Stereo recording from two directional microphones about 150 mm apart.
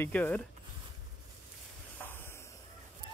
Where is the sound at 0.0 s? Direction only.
10° left (ahead or behind).